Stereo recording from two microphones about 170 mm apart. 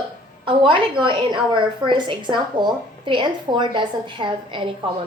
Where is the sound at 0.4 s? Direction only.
30° right (ahead or behind).